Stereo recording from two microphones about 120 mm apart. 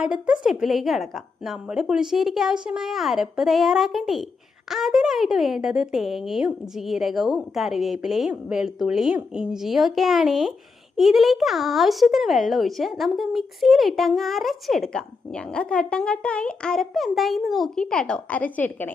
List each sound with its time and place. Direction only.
0.0 s speech: 5° right (ahead or behind); by 18.9 s 15° left (ahead or behind)